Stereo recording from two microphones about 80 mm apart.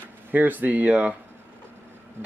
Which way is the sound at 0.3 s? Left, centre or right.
Right.